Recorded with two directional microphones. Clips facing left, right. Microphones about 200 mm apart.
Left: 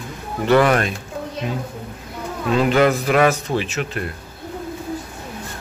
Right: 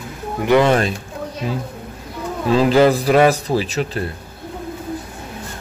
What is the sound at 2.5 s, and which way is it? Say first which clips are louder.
Speech: right 3 dB; 35° right (ahead or behind).